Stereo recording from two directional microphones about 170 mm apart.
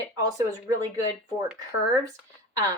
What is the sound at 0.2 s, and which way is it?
A woman's voice, 20° right (ahead or behind).